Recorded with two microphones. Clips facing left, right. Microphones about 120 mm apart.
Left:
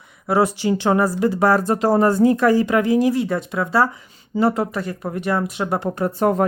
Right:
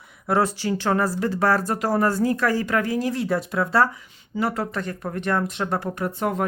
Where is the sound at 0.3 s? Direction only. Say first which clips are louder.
Left 4 dB; 10° left (ahead or behind).